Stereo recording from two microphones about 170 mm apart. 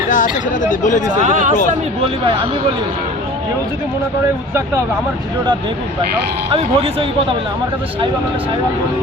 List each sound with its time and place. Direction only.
0.1 s speech: 50° left (ahead or behind)
1.2 s speech: 45° right (ahead or behind)
6.5 s speech: 35° right (ahead or behind)